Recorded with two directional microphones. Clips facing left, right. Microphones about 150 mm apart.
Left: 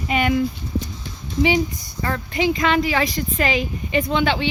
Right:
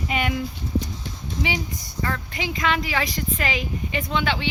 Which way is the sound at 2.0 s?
30° left (ahead or behind).